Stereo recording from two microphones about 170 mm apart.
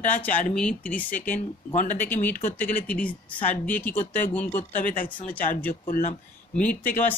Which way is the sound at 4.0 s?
50° left (ahead or behind).